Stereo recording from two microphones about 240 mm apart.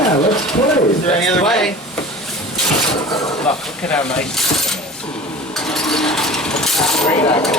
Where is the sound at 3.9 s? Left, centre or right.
Centre.